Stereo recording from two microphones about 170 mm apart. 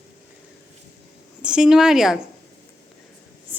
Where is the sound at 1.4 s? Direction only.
5° right (ahead or behind).